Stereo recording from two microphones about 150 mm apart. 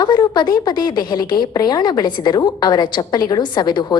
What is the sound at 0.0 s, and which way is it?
A woman's voice, 30° left (ahead or behind).